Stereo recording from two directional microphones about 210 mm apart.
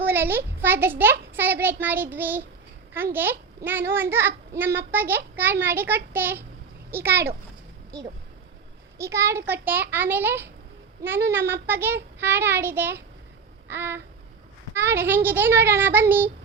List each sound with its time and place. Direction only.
0.0 s a child's voice: 10° right (ahead or behind)
9.0 s a child's voice: 15° right (ahead or behind)